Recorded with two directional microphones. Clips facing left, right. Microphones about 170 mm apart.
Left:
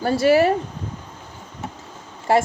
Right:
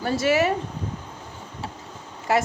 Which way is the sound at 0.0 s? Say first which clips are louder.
Left 5 dB; 35° left (ahead or behind).